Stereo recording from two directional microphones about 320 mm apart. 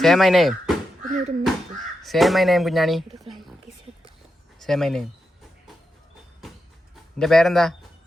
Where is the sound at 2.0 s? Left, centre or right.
Centre.